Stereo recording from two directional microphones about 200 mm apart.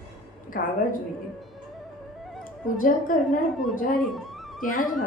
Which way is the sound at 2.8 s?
40° left (ahead or behind).